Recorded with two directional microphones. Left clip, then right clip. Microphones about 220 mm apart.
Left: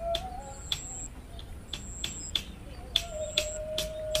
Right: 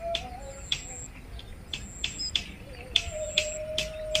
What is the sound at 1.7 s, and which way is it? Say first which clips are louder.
Cricket: right 3 dB; 30° left (ahead or behind).